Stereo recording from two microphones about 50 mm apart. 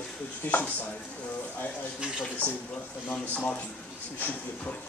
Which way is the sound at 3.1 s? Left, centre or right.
Left.